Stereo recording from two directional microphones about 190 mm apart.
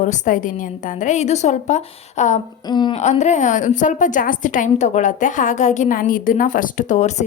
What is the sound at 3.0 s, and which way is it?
A woman's voice, 35° left (ahead or behind).